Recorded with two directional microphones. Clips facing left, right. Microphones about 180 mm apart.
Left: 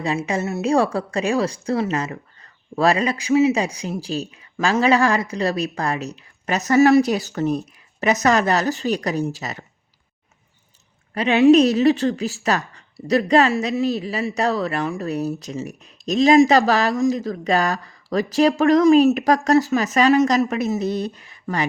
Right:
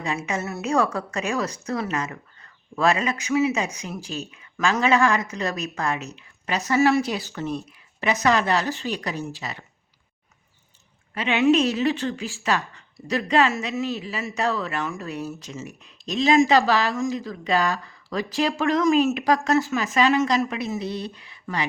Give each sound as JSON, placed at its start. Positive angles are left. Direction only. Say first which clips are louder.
{"t": 0.0, "sound": "a woman's voice", "louder": "left 5 dB", "side_deg": 30}
{"t": 11.1, "sound": "a woman's voice", "louder": "left 6 dB", "side_deg": 40}